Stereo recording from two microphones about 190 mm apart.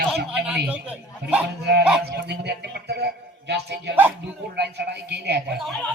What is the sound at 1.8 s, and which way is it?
Speech, 5° right (ahead or behind).